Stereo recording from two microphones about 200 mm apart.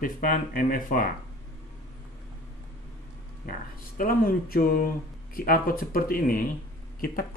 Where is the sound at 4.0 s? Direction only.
45° left (ahead or behind).